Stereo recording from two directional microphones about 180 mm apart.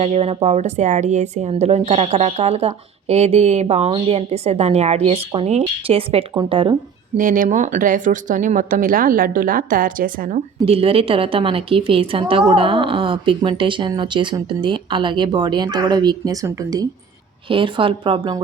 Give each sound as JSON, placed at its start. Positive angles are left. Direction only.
{"t": 0.0, "sound": "a woman's voice", "side_deg": -35}
{"t": 7.2, "sound": "speech", "side_deg": -50}
{"t": 10.7, "sound": "a woman's voice", "side_deg": -30}